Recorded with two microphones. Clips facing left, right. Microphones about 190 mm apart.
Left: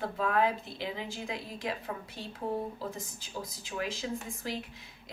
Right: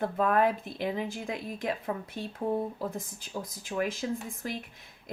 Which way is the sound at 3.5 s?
50° right (ahead or behind).